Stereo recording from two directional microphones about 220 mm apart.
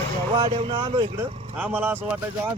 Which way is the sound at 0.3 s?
25° right (ahead or behind).